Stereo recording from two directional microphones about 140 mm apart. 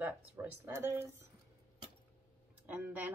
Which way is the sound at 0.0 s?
15° right (ahead or behind).